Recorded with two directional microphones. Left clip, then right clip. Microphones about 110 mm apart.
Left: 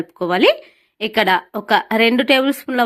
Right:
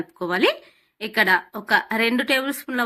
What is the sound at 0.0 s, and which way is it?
A woman's voice, 45° left (ahead or behind).